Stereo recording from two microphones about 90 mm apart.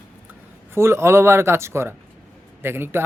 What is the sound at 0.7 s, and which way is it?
Speech, 30° right (ahead or behind).